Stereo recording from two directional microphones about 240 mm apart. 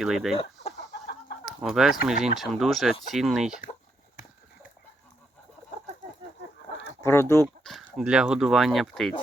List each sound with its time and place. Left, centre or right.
0.0 s speech: centre
1.5 s speech: centre
6.2 s a sound: right
7.0 s speech: centre
7.4 s speech: centre